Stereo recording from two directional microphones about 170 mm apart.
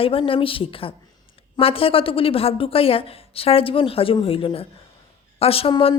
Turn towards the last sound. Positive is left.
turn(degrees=35)  # may be behind; listen again after turning